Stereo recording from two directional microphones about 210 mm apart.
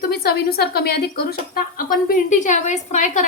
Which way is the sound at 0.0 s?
50° left (ahead or behind).